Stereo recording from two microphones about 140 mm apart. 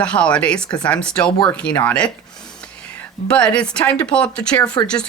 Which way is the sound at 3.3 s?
10° left (ahead or behind).